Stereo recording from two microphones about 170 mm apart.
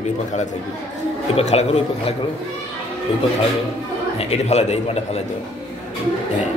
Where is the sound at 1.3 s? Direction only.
40° left (ahead or behind).